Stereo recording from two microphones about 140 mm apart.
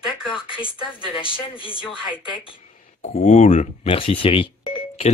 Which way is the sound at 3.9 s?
40° left (ahead or behind).